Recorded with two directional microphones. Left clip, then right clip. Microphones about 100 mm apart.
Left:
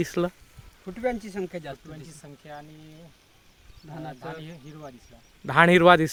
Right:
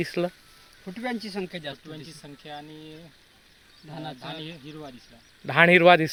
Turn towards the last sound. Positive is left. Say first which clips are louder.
# even
turn(degrees=55)  # may be behind; listen again after turning